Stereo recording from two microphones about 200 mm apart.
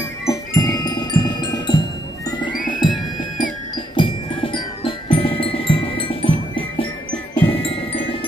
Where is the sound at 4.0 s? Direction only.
25° left (ahead or behind).